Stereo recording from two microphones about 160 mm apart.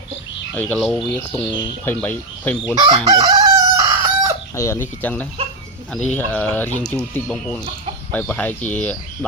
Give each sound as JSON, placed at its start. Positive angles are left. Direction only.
{"t": 0.5, "sound": "speech", "side_deg": 5}
{"t": 1.5, "sound": "speech", "side_deg": 30}
{"t": 1.8, "sound": "speech", "side_deg": 10}
{"t": 2.7, "sound": "chicken", "side_deg": -30}
{"t": 4.5, "sound": "speech", "side_deg": 20}